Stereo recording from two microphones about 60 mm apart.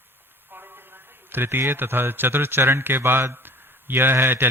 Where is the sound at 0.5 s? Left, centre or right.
Right.